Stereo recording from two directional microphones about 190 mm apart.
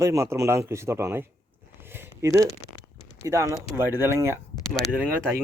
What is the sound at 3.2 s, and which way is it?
Speech, 15° right (ahead or behind).